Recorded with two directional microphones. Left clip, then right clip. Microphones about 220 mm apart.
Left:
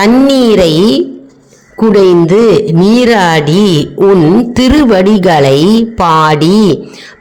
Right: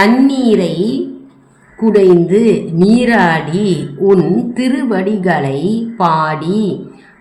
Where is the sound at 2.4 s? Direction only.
40° left (ahead or behind).